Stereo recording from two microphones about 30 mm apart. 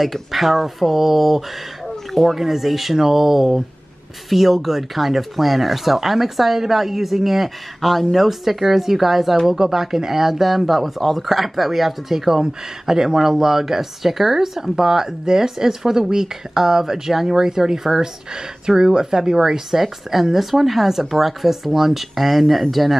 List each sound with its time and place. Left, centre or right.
0.0 s speech: centre